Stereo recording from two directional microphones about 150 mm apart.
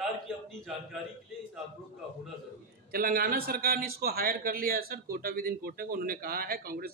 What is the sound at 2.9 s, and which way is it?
Speech, 75° right (ahead or behind).